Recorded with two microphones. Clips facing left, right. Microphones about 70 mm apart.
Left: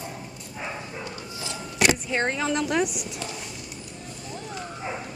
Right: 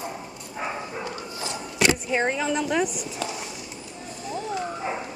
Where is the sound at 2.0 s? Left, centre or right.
Centre.